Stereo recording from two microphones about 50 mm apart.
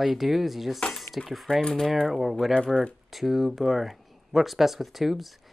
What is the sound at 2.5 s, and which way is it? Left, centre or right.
Speech, centre.